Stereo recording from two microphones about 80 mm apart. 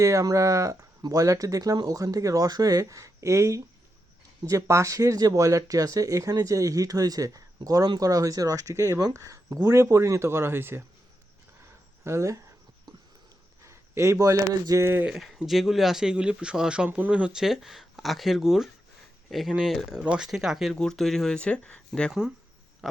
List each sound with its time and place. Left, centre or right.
0.0 s speech: right
12.0 s speech: right
13.7 s speech: right
15.4 s speech: centre
20.7 s speech: centre
22.8 s frog: centre